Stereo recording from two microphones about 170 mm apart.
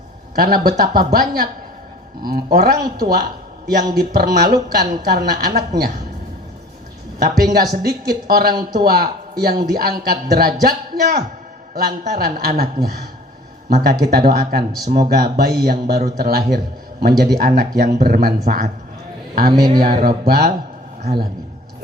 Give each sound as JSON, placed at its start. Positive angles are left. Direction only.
{"t": 0.3, "sound": "a man's voice", "side_deg": -60}
{"t": 2.2, "sound": "a man's voice", "side_deg": -60}
{"t": 7.2, "sound": "a man's voice", "side_deg": -65}
{"t": 19.5, "sound": "speech", "side_deg": -25}
{"t": 19.8, "sound": "a man's voice", "side_deg": -60}